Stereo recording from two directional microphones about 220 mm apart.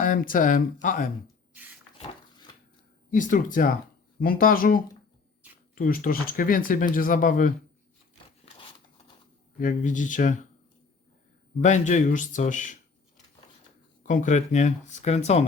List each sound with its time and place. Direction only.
0.0 s speech: 40° left (ahead or behind)
3.1 s speech: 35° left (ahead or behind)
9.6 s speech: 35° left (ahead or behind)
11.6 s speech: 35° left (ahead or behind)
14.0 s speech: 35° left (ahead or behind)